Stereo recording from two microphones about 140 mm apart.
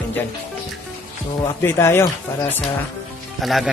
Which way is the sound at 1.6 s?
15° left (ahead or behind).